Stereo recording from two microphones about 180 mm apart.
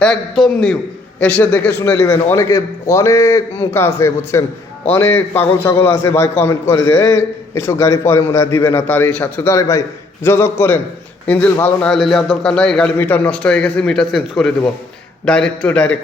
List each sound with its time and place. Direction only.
0.0 s a man's voice: 5° left (ahead or behind)